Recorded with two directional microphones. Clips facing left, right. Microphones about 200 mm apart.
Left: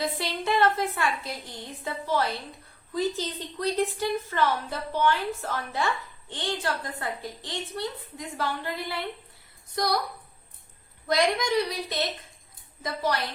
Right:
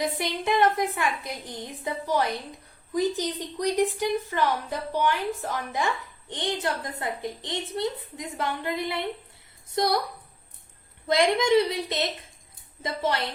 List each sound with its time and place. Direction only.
0.0 s a woman's voice: 15° right (ahead or behind)
11.1 s a child's voice: 25° right (ahead or behind)